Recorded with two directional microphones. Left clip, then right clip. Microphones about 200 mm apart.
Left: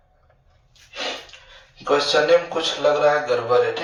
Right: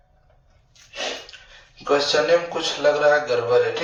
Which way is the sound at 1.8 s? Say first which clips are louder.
Left 1 dB; 15° right (ahead or behind).